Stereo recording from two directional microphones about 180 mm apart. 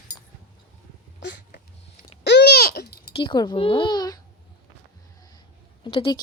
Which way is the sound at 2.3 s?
65° left (ahead or behind).